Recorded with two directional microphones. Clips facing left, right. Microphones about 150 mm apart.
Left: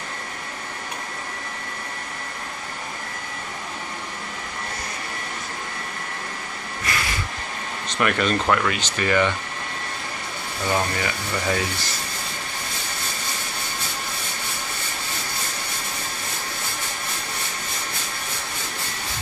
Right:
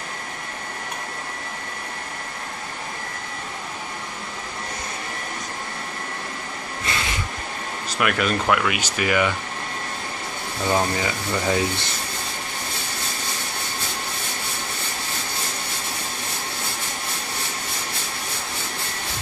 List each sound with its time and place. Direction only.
6.9 s vehicle: 25° right (ahead or behind)
7.9 s speech: 5° right (ahead or behind)
10.7 s speech: 20° right (ahead or behind)